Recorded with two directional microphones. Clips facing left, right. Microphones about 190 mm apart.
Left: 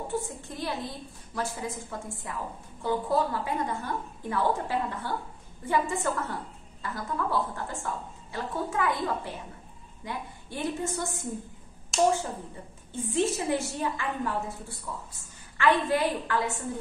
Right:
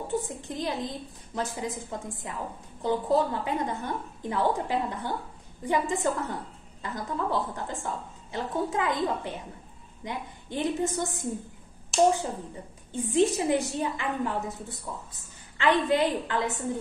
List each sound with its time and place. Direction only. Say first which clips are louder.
0.1 s a woman's voice: right 2 dB; 20° right (ahead or behind)
11.9 s speech: right 2 dB; centre (ahead or behind)
12.9 s a woman's voice: right 4 dB; 15° right (ahead or behind)